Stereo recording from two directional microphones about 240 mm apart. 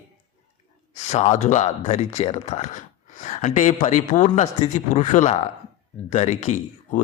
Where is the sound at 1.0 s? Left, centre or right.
Left.